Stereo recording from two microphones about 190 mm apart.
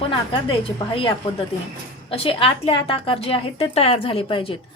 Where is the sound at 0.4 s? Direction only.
25° left (ahead or behind).